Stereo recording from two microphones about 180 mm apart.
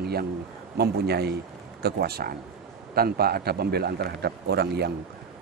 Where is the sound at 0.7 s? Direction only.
65° right (ahead or behind).